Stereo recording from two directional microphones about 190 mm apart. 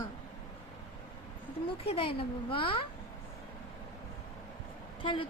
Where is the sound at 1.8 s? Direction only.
30° left (ahead or behind).